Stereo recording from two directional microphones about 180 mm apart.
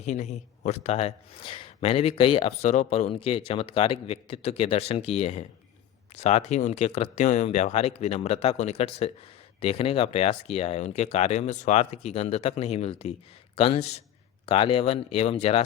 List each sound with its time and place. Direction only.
0.0 s a man's voice: 40° left (ahead or behind)